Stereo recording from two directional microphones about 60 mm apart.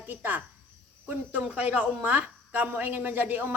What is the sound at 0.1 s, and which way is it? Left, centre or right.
Speech, right.